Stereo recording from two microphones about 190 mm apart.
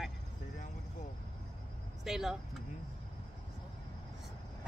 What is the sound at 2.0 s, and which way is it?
Speech, centre (ahead or behind).